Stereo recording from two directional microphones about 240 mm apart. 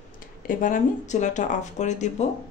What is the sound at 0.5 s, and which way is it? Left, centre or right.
Speech, left.